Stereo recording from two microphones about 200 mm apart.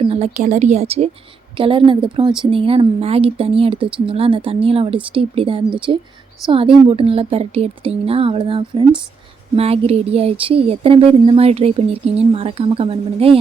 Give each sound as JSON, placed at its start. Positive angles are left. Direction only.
{"t": 0.1, "sound": "a woman's voice", "side_deg": -35}